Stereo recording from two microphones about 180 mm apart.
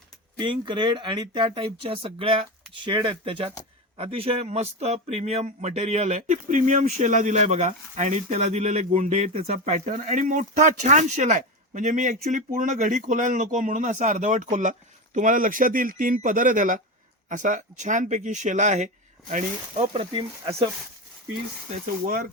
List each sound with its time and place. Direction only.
0.3 s a man's voice: 25° right (ahead or behind)
22.0 s a man's voice: 50° right (ahead or behind)